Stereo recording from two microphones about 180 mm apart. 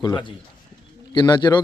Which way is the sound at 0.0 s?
25° left (ahead or behind).